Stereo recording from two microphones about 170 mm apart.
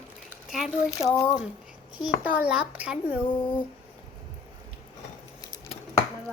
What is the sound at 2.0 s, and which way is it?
A child's voice, 5° right (ahead or behind).